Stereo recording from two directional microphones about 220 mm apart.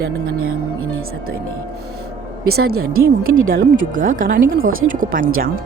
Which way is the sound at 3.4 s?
40° right (ahead or behind).